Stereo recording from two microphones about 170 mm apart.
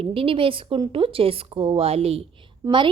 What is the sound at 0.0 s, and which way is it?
A woman's voice, 30° right (ahead or behind).